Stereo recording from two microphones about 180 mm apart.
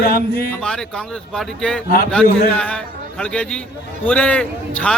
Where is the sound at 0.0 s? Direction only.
55° left (ahead or behind).